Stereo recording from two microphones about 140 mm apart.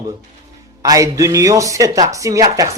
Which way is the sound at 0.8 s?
25° right (ahead or behind).